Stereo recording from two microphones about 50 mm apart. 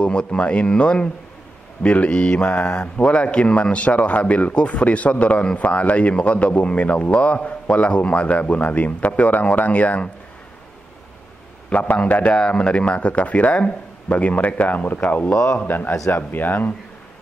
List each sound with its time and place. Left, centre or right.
0.0 s speech: centre
11.7 s a man's voice: left
12.4 s speech: centre; by 15.3 s left
15.3 s speech: centre
15.6 s a man's voice: left